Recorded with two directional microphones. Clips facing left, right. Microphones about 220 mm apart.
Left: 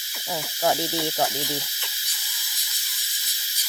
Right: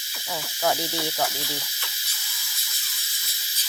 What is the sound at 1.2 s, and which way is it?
Speech, 15° left (ahead or behind).